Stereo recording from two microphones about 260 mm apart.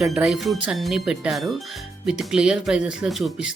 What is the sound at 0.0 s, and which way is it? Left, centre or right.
Speech, centre.